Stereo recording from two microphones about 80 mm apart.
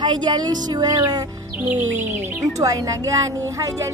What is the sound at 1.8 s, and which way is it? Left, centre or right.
Speech, right.